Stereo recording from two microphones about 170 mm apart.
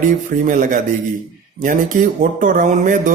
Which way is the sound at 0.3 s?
50° right (ahead or behind).